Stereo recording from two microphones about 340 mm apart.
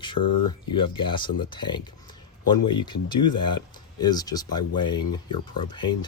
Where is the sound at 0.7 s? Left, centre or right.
Centre.